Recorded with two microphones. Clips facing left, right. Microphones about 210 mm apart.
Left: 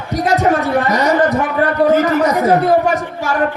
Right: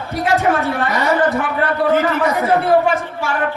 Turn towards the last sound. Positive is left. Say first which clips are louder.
# left 2 dB
turn(degrees=40)  # may be behind; listen again after turning